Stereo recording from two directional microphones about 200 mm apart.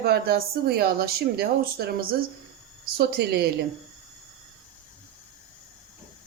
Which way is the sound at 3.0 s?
55° right (ahead or behind).